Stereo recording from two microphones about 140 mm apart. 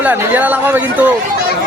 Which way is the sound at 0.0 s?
10° right (ahead or behind).